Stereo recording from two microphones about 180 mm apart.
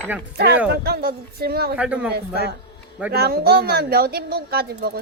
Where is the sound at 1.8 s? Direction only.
5° right (ahead or behind).